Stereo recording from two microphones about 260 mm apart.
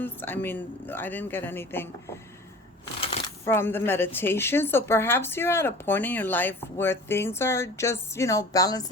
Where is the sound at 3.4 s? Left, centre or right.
Centre.